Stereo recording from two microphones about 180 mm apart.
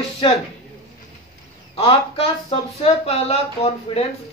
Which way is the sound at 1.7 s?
30° left (ahead or behind).